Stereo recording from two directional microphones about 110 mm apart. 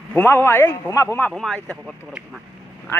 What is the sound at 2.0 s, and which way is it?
Speech, 10° right (ahead or behind).